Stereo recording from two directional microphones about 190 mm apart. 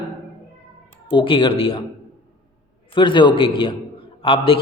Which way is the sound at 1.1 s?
25° left (ahead or behind).